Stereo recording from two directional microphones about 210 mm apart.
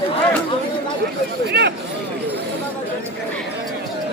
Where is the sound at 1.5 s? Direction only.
50° right (ahead or behind).